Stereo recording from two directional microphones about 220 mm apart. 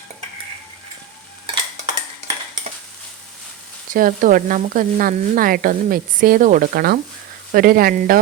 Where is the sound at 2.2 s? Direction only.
30° right (ahead or behind).